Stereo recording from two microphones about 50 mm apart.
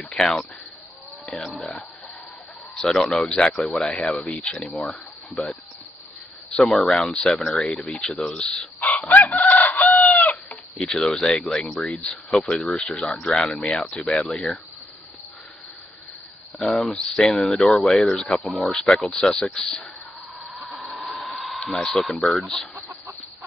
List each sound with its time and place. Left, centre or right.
0.1 s speech: centre
1.6 s speech: centre
9.1 s chicken: left
10.8 s speech: centre
16.6 s speech: centre
17.6 s speech: centre
20.7 s hair dryer: centre
21.6 s speech: centre